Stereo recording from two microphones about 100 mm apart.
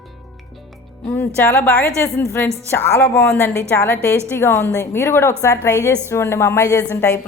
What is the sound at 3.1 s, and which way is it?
Speech, 10° left (ahead or behind).